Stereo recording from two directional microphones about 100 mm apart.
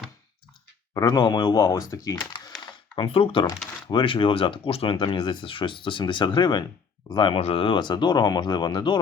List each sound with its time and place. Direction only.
0.9 s speech: 45° left (ahead or behind)
2.9 s speech: 60° left (ahead or behind)
7.3 s speech: 80° left; by 9.0 s 50° left (ahead or behind)